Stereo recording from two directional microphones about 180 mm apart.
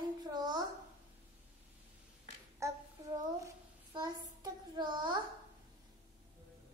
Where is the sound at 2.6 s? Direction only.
15° right (ahead or behind).